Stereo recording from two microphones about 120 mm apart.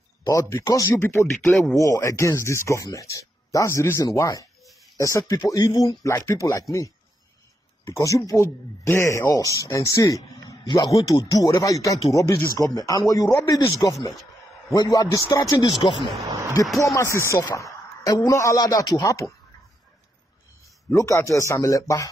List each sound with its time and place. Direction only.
0.2 s speech: 25° left (ahead or behind)
1.4 s speech: 5° left (ahead or behind)
1.8 s speech: 25° left (ahead or behind)
7.8 s speech: 25° left (ahead or behind)
16.8 s speech: 25° left (ahead or behind)
20.9 s speech: 25° left (ahead or behind)